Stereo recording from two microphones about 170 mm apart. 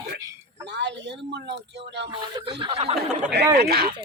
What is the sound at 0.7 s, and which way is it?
Speech, 90° right.